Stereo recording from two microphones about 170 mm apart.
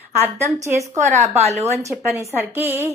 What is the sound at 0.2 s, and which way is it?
Speech, 15° right (ahead or behind).